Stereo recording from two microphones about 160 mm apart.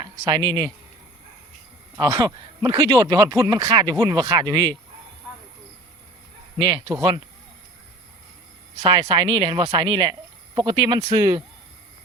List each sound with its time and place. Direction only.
0.0 s speech: 25° right (ahead or behind)
2.0 s speech: 25° right (ahead or behind)
6.6 s speech: 25° right (ahead or behind)
8.8 s speech: 25° right (ahead or behind)